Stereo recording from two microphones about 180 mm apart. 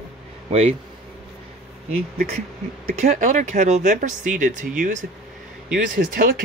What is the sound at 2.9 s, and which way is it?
Speech, 45° right (ahead or behind).